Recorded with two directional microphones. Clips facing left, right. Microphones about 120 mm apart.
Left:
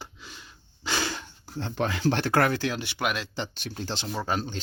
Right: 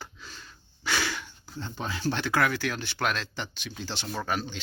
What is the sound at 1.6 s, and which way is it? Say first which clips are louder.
Speech: left 5 dB; 80° left.